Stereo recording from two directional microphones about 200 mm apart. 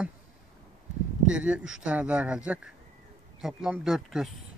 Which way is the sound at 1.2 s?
5° right (ahead or behind).